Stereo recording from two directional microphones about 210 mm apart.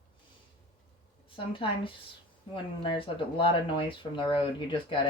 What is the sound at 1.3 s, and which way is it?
A woman's voice, 25° left (ahead or behind).